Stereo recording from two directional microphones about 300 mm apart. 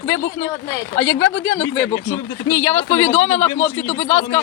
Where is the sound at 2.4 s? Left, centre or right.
Centre.